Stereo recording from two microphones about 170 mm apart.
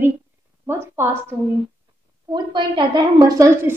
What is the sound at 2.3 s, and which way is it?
A woman's voice, 25° right (ahead or behind).